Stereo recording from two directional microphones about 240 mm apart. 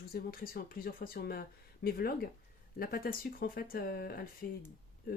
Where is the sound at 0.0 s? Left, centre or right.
Left.